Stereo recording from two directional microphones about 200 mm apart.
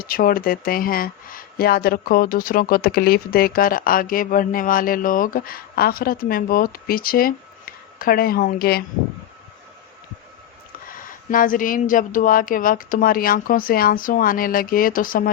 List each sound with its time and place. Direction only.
0.0 s speech: 45° left (ahead or behind)
10.8 s speech: 45° left (ahead or behind)